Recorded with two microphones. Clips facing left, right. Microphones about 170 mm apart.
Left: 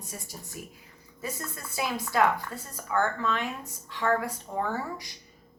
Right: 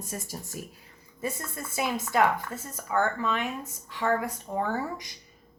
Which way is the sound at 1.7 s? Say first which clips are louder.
Right 2 dB; 20° right (ahead or behind).